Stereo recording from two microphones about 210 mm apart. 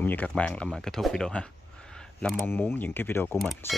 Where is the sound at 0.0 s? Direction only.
10° left (ahead or behind).